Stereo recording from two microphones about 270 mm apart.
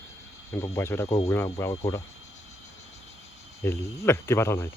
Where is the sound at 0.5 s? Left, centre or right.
Centre.